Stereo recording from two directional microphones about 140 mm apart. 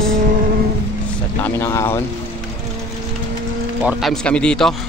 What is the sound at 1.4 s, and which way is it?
Speech, 20° left (ahead or behind).